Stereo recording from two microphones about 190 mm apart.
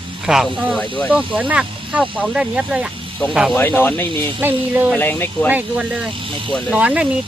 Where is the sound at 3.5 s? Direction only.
10° left (ahead or behind).